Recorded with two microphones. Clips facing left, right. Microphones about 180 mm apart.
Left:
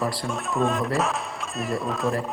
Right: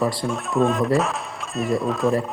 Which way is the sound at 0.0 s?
Centre (ahead or behind).